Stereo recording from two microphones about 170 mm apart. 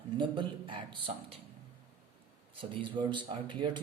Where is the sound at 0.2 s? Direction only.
30° right (ahead or behind).